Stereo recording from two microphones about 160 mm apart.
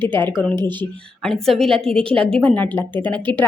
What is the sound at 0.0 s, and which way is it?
A woman's voice, 10° left (ahead or behind).